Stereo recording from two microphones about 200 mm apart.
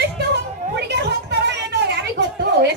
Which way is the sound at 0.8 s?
55° right (ahead or behind).